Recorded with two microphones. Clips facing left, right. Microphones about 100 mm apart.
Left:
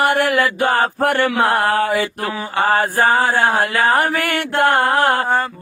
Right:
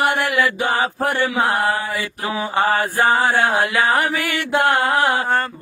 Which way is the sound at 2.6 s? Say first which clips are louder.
Left 3 dB; 45° left (ahead or behind).